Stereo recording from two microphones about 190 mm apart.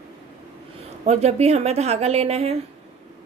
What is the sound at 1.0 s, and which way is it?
Speech, 35° right (ahead or behind).